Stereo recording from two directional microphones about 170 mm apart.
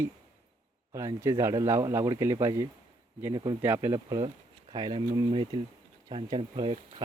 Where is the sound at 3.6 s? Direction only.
15° right (ahead or behind).